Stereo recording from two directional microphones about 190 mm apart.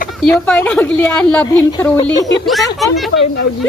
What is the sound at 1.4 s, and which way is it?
Speech, 20° left (ahead or behind).